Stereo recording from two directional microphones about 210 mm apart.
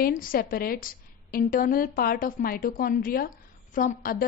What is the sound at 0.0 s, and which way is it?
A woman's voice, 40° left (ahead or behind).